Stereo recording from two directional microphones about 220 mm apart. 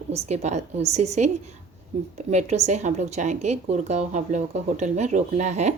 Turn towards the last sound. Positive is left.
turn(degrees=-30)  # may be behind; listen again after turning